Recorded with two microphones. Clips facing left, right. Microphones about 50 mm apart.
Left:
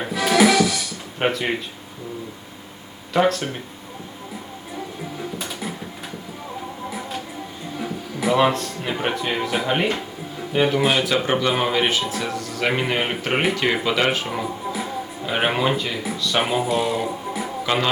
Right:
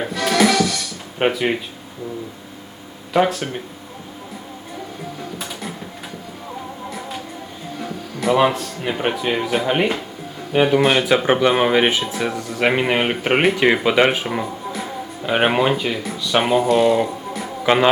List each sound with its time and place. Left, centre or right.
0.0 s music: centre
1.2 s speech: centre
3.1 s speech: centre
5.4 s printer: centre
7.8 s music: centre
8.4 s speech: centre
10.8 s speech: centre
11.0 s speech: right
14.4 s music: centre
15.2 s speech: centre
16.4 s speech: centre
17.6 s speech: centre